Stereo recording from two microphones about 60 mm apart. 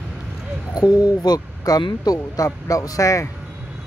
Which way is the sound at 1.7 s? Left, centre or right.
Left.